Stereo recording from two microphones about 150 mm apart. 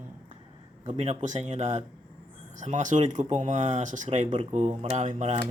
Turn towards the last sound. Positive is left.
turn(degrees=-50)  # may be behind; listen again after turning